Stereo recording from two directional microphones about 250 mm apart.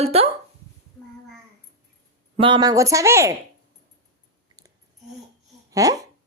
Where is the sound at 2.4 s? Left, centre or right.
Centre.